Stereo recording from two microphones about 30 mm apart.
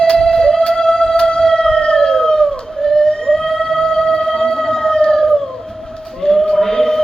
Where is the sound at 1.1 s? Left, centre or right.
Left.